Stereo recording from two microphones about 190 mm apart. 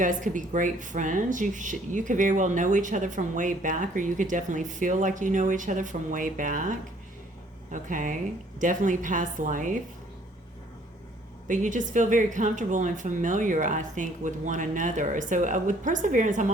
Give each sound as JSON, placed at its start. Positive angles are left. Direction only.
{"t": 0.0, "sound": "speech", "side_deg": -45}
{"t": 11.4, "sound": "a woman's voice", "side_deg": -40}